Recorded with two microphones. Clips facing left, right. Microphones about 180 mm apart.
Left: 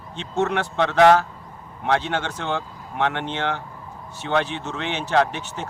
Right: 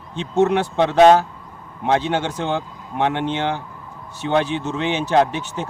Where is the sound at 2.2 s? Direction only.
10° right (ahead or behind).